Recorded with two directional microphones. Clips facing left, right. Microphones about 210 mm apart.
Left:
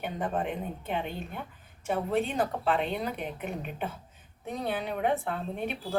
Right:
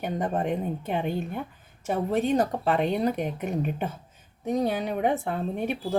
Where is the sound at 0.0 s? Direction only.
40° right (ahead or behind).